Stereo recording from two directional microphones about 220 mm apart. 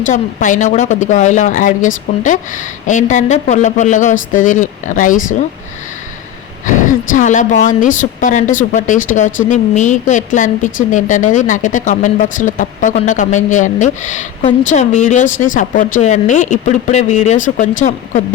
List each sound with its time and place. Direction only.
0.0 s speech: 35° left (ahead or behind)
7.1 s speech: 35° left (ahead or behind)